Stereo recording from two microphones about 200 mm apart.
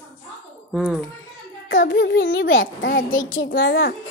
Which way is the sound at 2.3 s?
70° left (ahead or behind).